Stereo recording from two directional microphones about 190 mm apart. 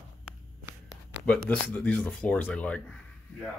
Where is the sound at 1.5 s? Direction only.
10° left (ahead or behind).